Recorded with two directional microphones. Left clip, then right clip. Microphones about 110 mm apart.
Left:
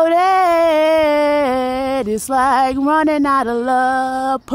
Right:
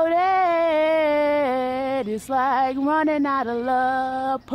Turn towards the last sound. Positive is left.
turn(degrees=60)  # may be behind; listen again after turning